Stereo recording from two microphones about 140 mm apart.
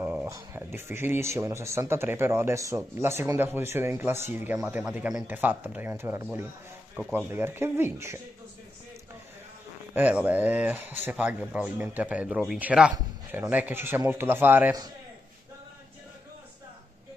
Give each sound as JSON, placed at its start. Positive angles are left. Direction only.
{"t": 0.0, "sound": "speech", "side_deg": -15}
{"t": 9.9, "sound": "speech", "side_deg": -10}